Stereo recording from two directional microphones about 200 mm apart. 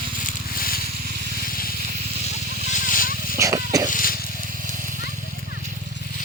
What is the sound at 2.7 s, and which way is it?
Vehicle, 40° left (ahead or behind).